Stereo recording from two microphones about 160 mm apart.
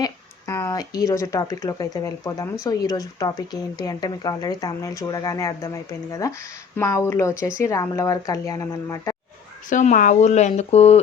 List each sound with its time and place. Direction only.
0.0 s speech: 20° left (ahead or behind)
9.6 s speech: 50° left (ahead or behind)